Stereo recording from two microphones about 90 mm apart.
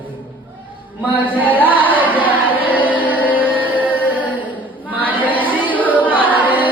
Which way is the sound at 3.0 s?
20° right (ahead or behind).